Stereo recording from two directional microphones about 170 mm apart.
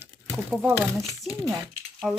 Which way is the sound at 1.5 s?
15° right (ahead or behind).